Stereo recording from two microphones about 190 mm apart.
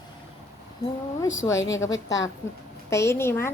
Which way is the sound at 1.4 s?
15° left (ahead or behind).